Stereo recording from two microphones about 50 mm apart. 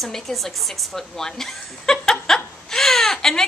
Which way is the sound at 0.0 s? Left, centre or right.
Centre.